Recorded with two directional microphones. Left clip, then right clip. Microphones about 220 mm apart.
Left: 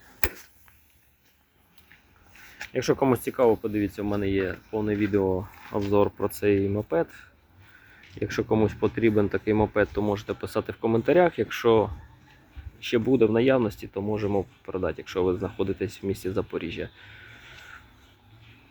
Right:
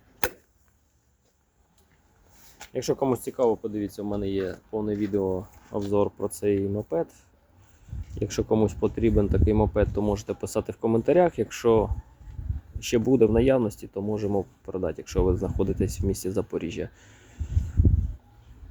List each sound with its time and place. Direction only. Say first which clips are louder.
2.6 s speech: left 2 dB; centre (ahead or behind)
5.2 s speech: left 2 dB; 5° left (ahead or behind)
5.9 s speech: left 2 dB; 10° right (ahead or behind)
8.2 s speech: even; 25° right (ahead or behind)
12.8 s speech: right 1 dB; 30° right (ahead or behind); by 14.8 s 10° right (ahead or behind)
14.8 s speech: even; 25° right (ahead or behind)